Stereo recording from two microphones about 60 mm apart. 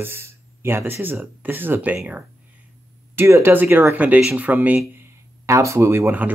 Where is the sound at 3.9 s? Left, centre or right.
Right.